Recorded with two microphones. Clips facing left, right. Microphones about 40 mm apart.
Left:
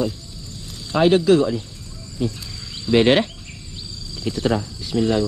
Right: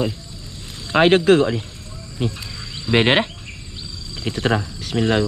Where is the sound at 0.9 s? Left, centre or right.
Right.